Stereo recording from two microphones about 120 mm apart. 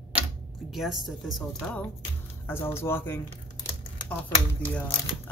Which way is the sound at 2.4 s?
20° left (ahead or behind).